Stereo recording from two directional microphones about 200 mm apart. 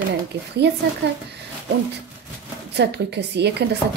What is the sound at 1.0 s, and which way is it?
Speech, 60° right (ahead or behind).